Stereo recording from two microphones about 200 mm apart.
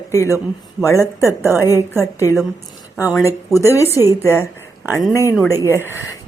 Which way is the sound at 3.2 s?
15° left (ahead or behind).